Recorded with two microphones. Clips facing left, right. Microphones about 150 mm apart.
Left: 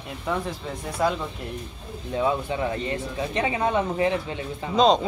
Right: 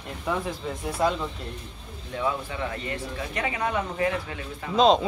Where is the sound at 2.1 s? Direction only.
25° left (ahead or behind).